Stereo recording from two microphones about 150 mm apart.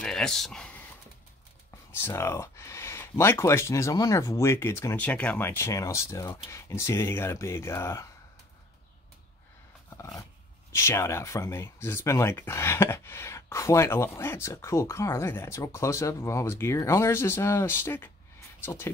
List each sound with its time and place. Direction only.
0.0 s a sound: 5° left (ahead or behind)
1.9 s speech: 15° left (ahead or behind)
9.8 s roar: 20° left (ahead or behind)
10.7 s speech: 20° left (ahead or behind)